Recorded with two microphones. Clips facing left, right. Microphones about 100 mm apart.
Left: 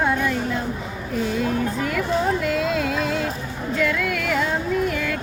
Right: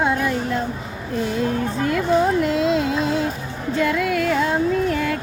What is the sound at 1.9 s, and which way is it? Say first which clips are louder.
Music: right 6 dB; 25° right (ahead or behind).